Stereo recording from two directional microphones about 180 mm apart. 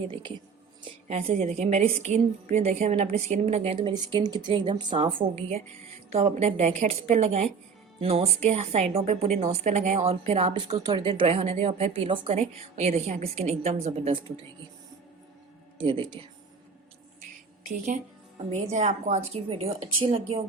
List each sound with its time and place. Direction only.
1.0 s a woman's voice: 40° right (ahead or behind)
10.7 s a woman's voice: 25° right (ahead or behind)
15.8 s speech: 25° right (ahead or behind)
17.7 s a woman's voice: 45° right (ahead or behind)